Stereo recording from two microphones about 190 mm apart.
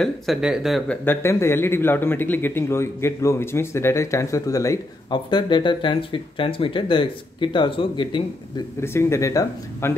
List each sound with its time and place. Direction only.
0.0 s speech: centre (ahead or behind)
1.0 s a man's voice: 15° left (ahead or behind)
8.8 s a man's voice: 15° left (ahead or behind)